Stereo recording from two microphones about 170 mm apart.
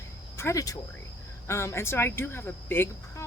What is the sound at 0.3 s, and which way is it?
Speech, 20° left (ahead or behind).